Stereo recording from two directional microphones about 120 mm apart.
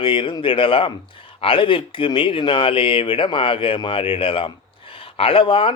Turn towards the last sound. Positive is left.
turn(degrees=50)  # may be behind; listen again after turning